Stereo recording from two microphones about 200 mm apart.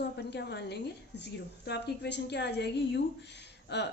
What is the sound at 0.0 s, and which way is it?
A woman's voice, 55° left (ahead or behind).